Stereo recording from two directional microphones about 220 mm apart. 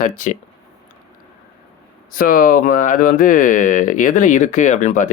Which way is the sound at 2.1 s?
40° left (ahead or behind).